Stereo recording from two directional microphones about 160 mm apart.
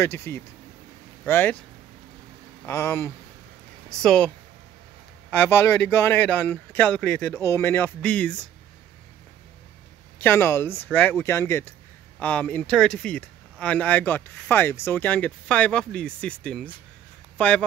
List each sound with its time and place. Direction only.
0.0 s speech: 15° left (ahead or behind)
2.6 s speech: 15° left (ahead or behind)
4.0 s speech: 5° left (ahead or behind)
5.3 s speech: 15° left (ahead or behind)
10.2 s speech: 15° left (ahead or behind)